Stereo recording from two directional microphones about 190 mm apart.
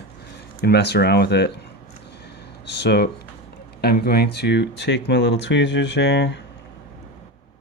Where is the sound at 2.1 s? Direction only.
60° left (ahead or behind).